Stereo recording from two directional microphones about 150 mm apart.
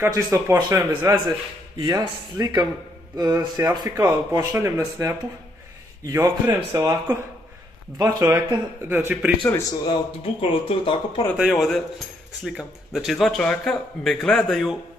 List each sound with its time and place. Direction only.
0.1 s speech: 20° right (ahead or behind)
9.7 s speech: 30° left (ahead or behind)
11.3 s speech: centre (ahead or behind)